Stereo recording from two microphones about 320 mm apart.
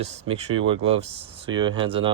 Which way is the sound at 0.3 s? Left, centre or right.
Centre.